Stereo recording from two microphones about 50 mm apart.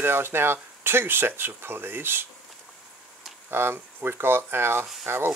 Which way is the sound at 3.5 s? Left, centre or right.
Right.